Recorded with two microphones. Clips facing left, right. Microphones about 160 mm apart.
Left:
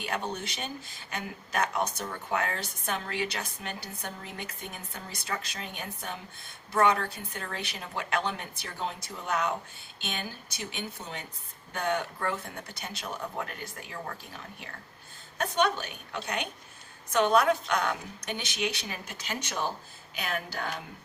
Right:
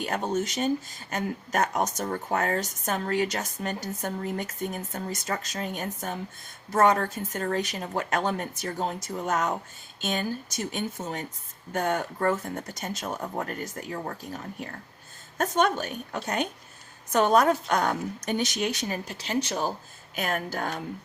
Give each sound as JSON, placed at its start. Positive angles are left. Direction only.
{"t": 0.0, "sound": "speech", "side_deg": -45}